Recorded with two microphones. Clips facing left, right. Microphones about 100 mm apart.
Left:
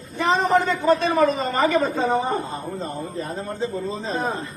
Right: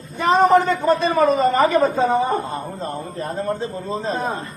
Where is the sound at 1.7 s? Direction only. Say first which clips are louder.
Right 4 dB; 55° right (ahead or behind).